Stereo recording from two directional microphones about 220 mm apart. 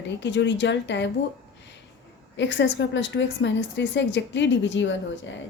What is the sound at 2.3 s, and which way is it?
A woman's voice, 55° left (ahead or behind).